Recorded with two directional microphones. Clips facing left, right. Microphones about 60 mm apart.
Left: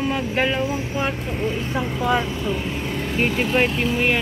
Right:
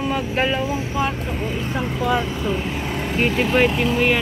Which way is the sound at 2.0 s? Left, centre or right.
Centre.